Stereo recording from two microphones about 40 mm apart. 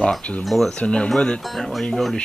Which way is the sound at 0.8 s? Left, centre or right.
Left.